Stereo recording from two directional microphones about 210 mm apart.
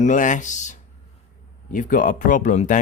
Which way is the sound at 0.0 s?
35° left (ahead or behind).